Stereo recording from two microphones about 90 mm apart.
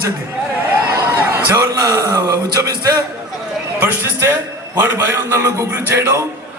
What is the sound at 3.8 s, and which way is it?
A man's voice, 25° right (ahead or behind).